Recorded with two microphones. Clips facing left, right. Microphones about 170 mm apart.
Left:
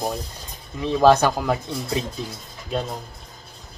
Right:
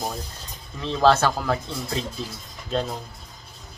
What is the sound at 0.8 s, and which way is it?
Speech, 15° left (ahead or behind).